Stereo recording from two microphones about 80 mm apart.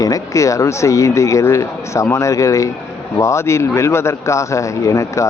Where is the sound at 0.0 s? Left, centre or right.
Left.